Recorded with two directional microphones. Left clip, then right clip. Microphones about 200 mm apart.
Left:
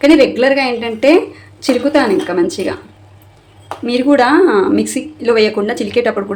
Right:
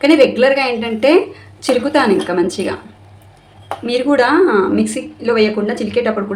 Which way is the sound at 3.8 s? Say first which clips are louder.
Left 2 dB; 10° left (ahead or behind).